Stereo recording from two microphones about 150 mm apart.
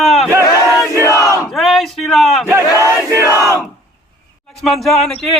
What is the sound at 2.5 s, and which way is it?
Battle cry, 20° right (ahead or behind).